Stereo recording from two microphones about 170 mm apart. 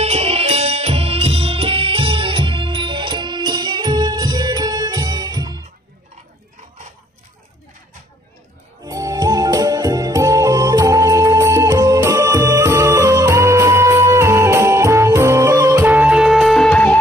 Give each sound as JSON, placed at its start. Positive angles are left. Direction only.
{"t": 0.0, "sound": "music", "side_deg": -35}
{"t": 8.8, "sound": "music", "side_deg": -20}